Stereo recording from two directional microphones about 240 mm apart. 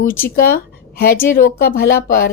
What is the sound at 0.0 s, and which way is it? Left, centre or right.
A woman's voice, left.